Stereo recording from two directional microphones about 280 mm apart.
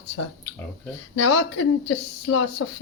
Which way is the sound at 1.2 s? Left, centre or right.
Left.